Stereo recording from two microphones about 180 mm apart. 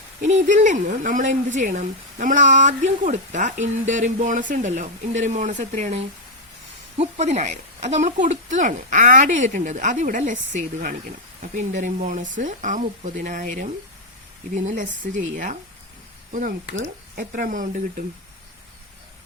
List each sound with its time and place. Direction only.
0.2 s speech: 40° right (ahead or behind)